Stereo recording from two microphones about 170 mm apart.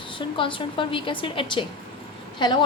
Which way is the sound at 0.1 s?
30° left (ahead or behind).